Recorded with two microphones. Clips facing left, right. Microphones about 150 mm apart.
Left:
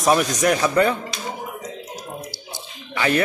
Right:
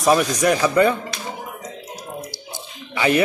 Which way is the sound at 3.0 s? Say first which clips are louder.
Right 2 dB; 15° right (ahead or behind).